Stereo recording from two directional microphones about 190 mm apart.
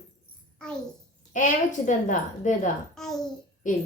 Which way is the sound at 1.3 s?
40° left (ahead or behind).